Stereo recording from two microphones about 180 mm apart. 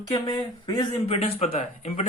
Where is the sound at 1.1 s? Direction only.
35° left (ahead or behind).